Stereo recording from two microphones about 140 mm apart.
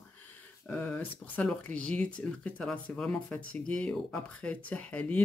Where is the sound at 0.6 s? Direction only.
10° left (ahead or behind).